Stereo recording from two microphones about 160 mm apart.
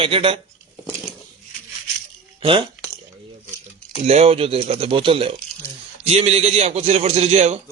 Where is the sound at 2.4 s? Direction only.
35° right (ahead or behind).